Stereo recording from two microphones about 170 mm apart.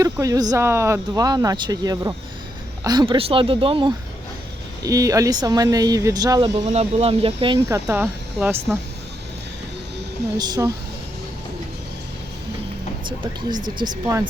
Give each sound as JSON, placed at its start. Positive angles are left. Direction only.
{"t": 0.0, "sound": "speech", "side_deg": -20}
{"t": 4.8, "sound": "speech", "side_deg": -20}
{"t": 6.7, "sound": "speech", "side_deg": -35}
{"t": 7.7, "sound": "speech", "side_deg": -15}
{"t": 10.3, "sound": "speech", "side_deg": -25}
{"t": 13.7, "sound": "speech", "side_deg": -25}